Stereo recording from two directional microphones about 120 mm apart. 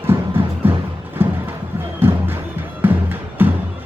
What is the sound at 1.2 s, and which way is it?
Clip-clop, 15° right (ahead or behind).